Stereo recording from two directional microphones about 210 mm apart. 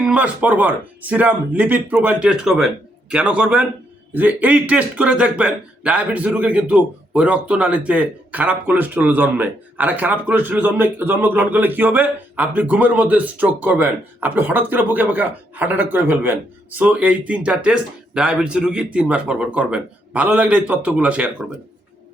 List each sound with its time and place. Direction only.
0.0 s a man's voice: 5° right (ahead or behind)